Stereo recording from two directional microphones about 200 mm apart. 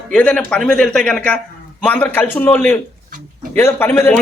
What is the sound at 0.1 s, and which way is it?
A man's voice, 5° left (ahead or behind).